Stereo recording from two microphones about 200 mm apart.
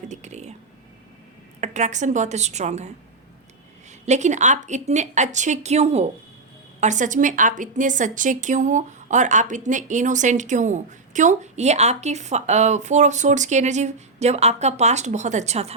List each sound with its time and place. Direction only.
0.1 s a sound: 35° right (ahead or behind)
1.6 s a woman's voice: 35° right (ahead or behind)
4.0 s a woman's voice: 35° right (ahead or behind)